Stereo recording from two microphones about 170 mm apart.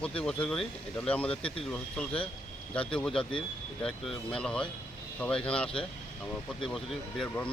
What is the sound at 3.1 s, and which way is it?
Speech, 30° left (ahead or behind).